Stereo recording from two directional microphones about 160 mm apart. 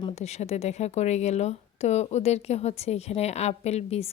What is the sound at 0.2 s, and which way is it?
Speech, 45° left (ahead or behind).